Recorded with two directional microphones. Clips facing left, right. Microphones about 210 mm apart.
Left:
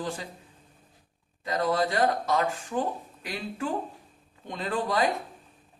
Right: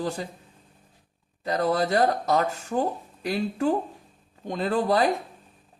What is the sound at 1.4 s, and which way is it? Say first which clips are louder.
Speech: right 2 dB; 40° right (ahead or behind).